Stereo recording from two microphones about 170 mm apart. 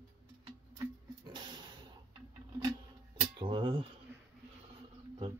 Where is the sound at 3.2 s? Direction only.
30° right (ahead or behind).